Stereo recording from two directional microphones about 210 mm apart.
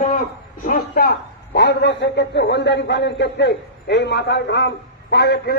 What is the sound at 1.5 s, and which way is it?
A man's voice, 55° left (ahead or behind).